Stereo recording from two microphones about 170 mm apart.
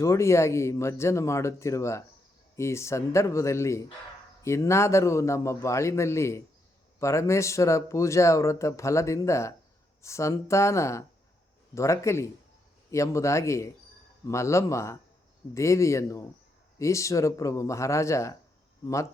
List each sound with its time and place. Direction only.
0.0 s speech: 15° left (ahead or behind)